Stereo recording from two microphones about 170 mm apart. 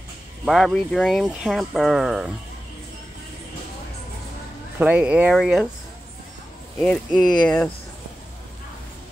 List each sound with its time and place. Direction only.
0.5 s speech: centre (ahead or behind)
4.7 s speech: 10° right (ahead or behind)
6.8 s speech: centre (ahead or behind)